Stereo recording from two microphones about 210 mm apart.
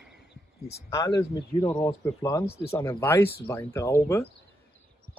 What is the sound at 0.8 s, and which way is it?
Speech, 20° left (ahead or behind).